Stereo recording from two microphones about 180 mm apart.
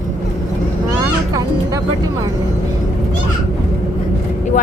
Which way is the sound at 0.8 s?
20° right (ahead or behind).